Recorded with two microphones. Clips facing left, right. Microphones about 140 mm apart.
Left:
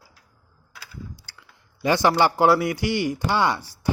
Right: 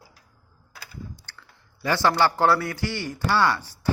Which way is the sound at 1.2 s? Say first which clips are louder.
Right 1 dB; 15° left (ahead or behind).